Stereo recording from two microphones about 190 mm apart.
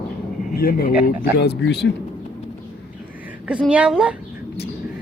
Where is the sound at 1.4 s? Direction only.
60° left (ahead or behind).